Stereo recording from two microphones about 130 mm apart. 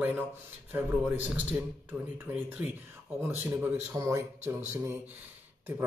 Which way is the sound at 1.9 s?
15° right (ahead or behind).